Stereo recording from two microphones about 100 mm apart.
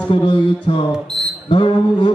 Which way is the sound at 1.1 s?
5° left (ahead or behind).